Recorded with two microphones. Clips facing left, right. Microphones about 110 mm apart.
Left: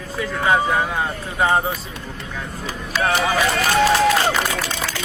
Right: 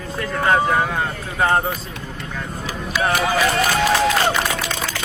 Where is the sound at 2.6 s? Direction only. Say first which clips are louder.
Even; 10° right (ahead or behind).